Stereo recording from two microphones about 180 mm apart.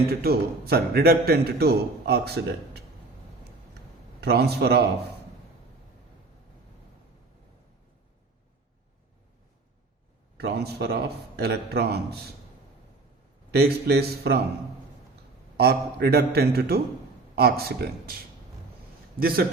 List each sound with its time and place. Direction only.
0.1 s a man's voice: 60° right (ahead or behind)
4.2 s a man's voice: 65° right (ahead or behind)
10.3 s a man's voice: 60° right (ahead or behind)
13.5 s a man's voice: 60° right (ahead or behind)
15.5 s a man's voice: 60° right (ahead or behind)